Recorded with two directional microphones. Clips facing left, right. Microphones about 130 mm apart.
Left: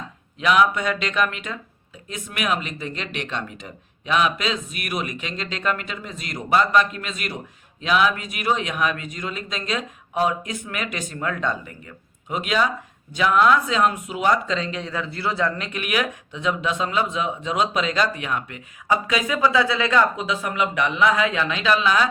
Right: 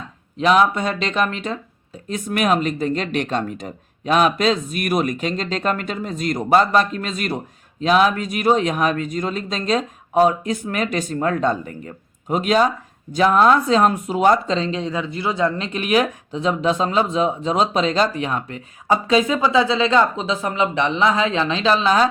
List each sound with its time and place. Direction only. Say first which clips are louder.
0.3 s speech: right 3 dB; 35° right (ahead or behind)